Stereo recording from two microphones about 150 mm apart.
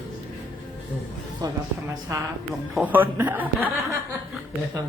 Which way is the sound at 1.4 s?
25° right (ahead or behind).